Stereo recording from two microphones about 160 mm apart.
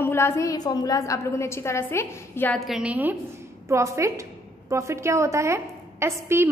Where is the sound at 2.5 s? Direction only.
Centre (ahead or behind).